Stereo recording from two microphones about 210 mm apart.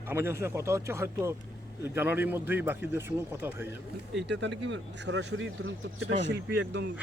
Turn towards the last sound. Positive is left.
turn(degrees=-55)  # may be behind; listen again after turning